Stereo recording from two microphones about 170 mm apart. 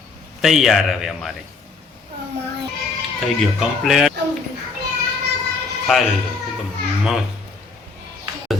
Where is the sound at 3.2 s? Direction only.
Centre (ahead or behind).